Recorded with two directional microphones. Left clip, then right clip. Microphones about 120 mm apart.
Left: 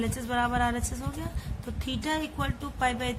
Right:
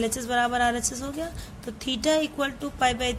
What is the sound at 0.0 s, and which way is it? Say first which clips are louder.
A woman's voice: right 4 dB; 30° right (ahead or behind).